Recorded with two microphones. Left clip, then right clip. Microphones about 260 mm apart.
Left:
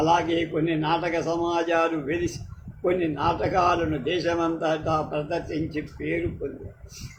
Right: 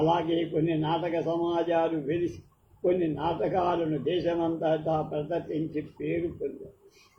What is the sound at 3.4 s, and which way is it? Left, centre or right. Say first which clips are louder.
A man's voice: left 4 dB; left.